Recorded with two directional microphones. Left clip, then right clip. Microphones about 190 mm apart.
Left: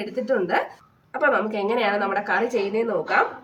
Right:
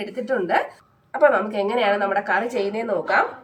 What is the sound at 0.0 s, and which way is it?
A woman's voice, 15° right (ahead or behind).